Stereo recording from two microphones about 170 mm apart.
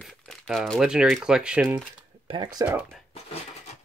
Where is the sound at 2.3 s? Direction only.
30° right (ahead or behind).